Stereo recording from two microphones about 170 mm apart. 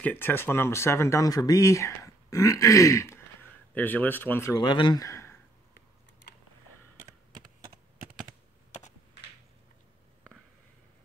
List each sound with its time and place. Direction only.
0.0 s speech: 10° left (ahead or behind)